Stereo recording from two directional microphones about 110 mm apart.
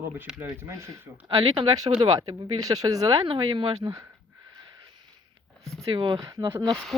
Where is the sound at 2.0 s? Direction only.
35° right (ahead or behind).